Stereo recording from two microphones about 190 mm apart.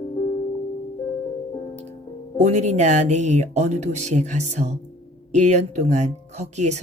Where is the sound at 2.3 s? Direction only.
35° right (ahead or behind).